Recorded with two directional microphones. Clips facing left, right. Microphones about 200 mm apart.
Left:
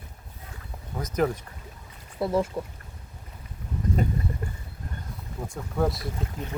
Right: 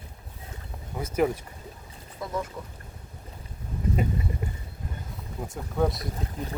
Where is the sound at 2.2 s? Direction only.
30° left (ahead or behind).